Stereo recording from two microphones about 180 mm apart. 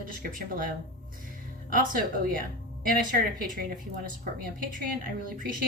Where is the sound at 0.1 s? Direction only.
50° right (ahead or behind).